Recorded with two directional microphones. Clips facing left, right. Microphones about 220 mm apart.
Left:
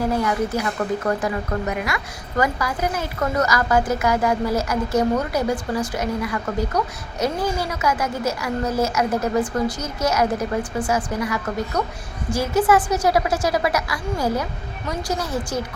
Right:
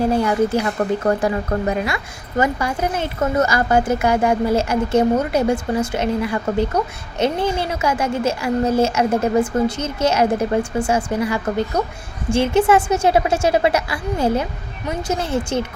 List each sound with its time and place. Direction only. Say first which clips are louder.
0.0 s speech: right 4 dB; 30° right (ahead or behind)